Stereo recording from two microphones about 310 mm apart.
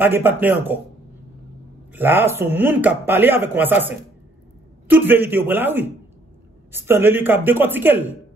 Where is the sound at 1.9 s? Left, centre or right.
Centre.